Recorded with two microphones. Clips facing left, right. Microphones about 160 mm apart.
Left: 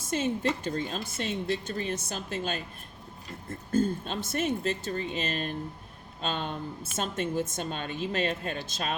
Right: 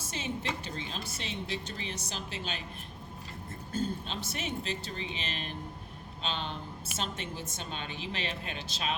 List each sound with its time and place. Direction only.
0.1 s speech: 50° left (ahead or behind)